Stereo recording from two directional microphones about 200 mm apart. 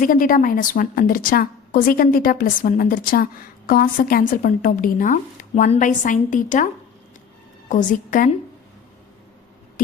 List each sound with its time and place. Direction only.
0.0 s a woman's voice: 40° left (ahead or behind)
7.7 s a woman's voice: 40° left (ahead or behind)